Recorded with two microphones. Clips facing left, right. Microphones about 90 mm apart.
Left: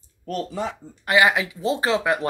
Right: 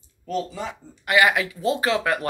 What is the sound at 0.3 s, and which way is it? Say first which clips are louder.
Speech: even; 60° left (ahead or behind).